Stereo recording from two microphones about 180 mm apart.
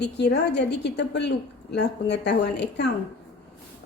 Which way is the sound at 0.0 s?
70° left (ahead or behind).